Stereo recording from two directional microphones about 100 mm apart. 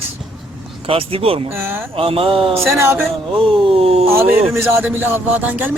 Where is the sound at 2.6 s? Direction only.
25° right (ahead or behind).